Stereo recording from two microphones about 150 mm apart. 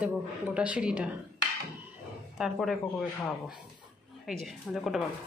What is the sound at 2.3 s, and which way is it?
Speech, 5° right (ahead or behind).